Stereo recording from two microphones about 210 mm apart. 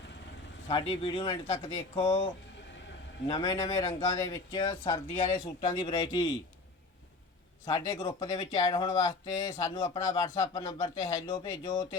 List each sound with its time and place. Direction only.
0.7 s speech: 25° left (ahead or behind)
3.2 s speech: 20° left (ahead or behind)
5.1 s speech: 35° left (ahead or behind)
5.8 s speech: 25° left (ahead or behind)
7.7 s speech: 20° left (ahead or behind)